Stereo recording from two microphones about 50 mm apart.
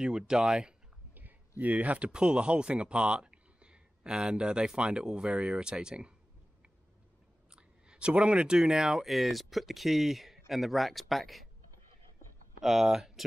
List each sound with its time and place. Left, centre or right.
0.0 s speech: centre
1.6 s speech: right
7.5 s speech: right; by 11.4 s centre
12.6 s speech: centre